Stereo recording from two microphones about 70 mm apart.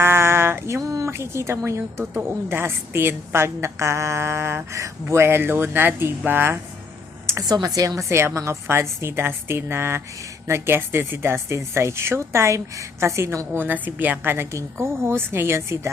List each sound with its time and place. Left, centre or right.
0.0 s female singing: right
0.8 s a woman's voice: right
7.4 s a woman's voice: right
13.6 s a woman's voice: right
14.3 s a woman's voice: right